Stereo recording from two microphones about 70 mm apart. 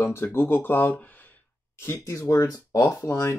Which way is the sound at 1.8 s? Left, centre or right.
Left.